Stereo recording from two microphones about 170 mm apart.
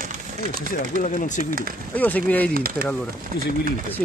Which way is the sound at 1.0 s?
45° left (ahead or behind).